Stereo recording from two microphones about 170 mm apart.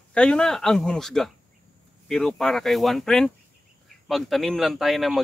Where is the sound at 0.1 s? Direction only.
5° left (ahead or behind).